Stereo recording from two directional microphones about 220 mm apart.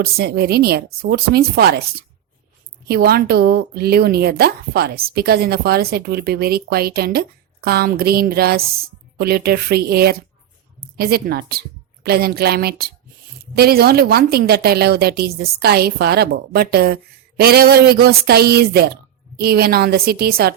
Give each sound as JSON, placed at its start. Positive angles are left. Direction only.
{"t": 0.0, "sound": "a woman's voice", "side_deg": -45}